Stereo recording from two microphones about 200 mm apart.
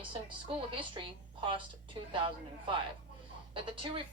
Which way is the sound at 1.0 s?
25° right (ahead or behind).